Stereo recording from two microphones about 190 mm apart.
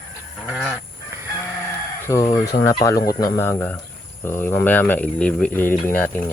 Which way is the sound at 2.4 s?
15° left (ahead or behind).